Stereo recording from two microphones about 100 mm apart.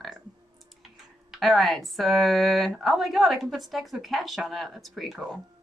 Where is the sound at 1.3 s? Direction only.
Centre (ahead or behind).